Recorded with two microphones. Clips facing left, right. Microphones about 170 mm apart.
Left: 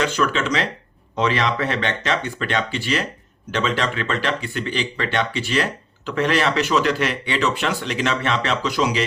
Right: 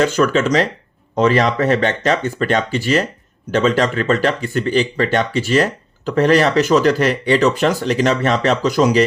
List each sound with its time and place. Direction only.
0.0 s speech: 45° right (ahead or behind)